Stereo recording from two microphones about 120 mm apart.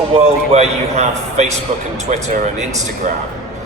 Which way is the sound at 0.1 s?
60° right (ahead or behind).